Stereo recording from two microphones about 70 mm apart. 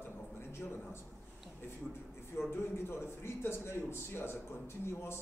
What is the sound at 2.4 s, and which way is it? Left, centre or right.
A man's voice, left.